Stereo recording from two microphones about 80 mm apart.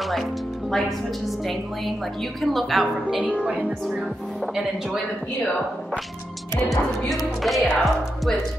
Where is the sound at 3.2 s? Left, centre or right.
Centre.